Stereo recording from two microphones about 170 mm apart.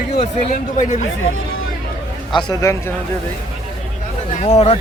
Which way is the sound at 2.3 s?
20° left (ahead or behind).